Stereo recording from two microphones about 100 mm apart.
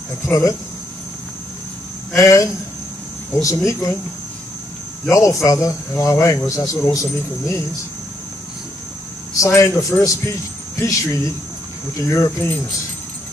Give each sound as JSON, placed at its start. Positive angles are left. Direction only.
{"t": 0.3, "sound": "speech", "side_deg": 35}
{"t": 2.1, "sound": "speech", "side_deg": 30}
{"t": 5.1, "sound": "speech", "side_deg": 30}
{"t": 9.4, "sound": "speech", "side_deg": 30}